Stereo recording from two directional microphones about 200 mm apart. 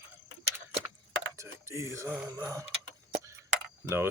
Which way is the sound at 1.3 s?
15° right (ahead or behind).